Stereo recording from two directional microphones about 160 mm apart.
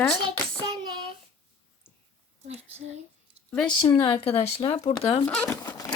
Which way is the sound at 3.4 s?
40° right (ahead or behind).